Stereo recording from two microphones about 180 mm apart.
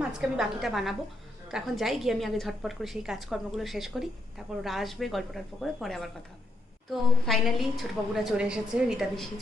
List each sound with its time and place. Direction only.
0.1 s a woman's voice: 5° right (ahead or behind)